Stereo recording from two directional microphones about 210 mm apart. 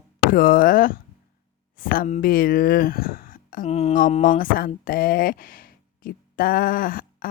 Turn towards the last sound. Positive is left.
turn(degrees=45)  # may be behind; listen again after turning